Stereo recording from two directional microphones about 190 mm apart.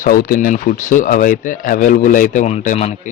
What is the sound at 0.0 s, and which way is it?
Speech, 50° left (ahead or behind).